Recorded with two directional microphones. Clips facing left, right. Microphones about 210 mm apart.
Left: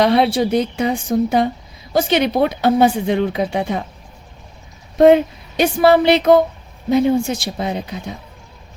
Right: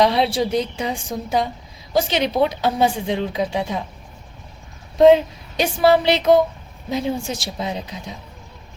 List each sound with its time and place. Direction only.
0.0 s a woman's voice: 60° left (ahead or behind)
4.9 s a woman's voice: 60° left (ahead or behind)